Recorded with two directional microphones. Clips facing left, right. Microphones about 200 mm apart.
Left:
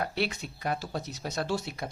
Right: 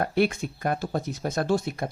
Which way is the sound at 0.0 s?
50° right (ahead or behind).